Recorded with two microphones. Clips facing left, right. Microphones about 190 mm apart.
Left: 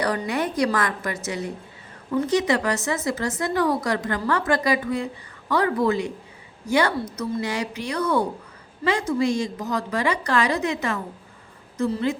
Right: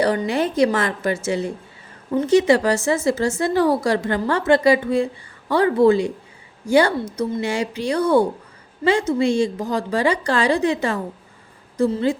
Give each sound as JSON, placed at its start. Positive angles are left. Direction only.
{"t": 0.0, "sound": "a woman's voice", "side_deg": -25}